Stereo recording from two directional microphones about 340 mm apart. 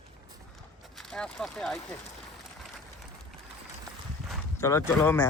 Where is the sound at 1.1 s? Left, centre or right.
Centre.